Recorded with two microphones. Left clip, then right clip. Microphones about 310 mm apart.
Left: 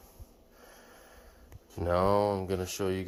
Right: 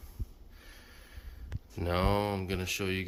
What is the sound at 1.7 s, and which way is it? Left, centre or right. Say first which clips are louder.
Speech: left 4 dB; centre.